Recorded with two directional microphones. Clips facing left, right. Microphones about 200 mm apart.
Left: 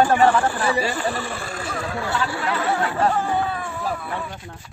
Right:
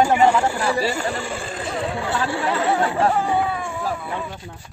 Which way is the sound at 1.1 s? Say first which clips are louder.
Even; 15° right (ahead or behind).